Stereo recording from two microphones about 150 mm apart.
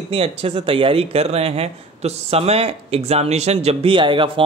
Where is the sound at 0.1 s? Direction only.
40° right (ahead or behind).